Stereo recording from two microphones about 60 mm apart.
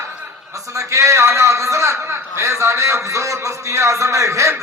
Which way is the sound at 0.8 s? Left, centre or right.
Right.